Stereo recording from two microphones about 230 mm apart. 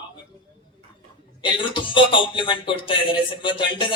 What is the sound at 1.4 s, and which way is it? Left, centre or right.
Speech, left.